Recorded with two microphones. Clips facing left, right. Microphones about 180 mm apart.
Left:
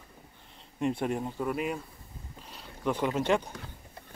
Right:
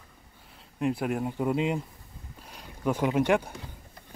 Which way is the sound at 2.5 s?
10° right (ahead or behind).